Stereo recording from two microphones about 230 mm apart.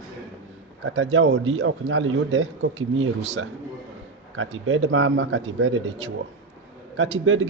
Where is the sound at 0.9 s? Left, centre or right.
Right.